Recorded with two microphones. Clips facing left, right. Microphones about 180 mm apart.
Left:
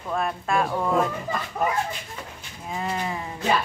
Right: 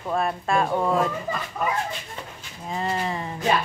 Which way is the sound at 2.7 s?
5° left (ahead or behind).